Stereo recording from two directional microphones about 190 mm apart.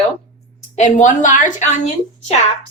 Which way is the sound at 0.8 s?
40° left (ahead or behind).